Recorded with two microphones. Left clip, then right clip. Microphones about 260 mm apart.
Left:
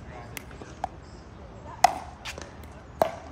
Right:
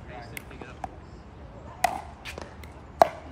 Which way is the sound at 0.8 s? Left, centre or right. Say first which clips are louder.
Left 6 dB; centre.